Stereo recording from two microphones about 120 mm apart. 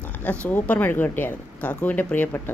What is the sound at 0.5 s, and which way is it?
Speech, 15° left (ahead or behind).